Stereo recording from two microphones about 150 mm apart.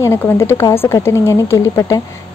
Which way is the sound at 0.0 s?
20° left (ahead or behind).